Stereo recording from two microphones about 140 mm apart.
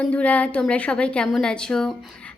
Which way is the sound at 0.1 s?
10° left (ahead or behind).